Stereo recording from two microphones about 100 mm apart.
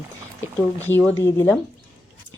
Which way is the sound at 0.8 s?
20° left (ahead or behind).